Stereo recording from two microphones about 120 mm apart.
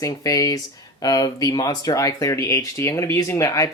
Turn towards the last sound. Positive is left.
turn(degrees=25)  # may be behind; listen again after turning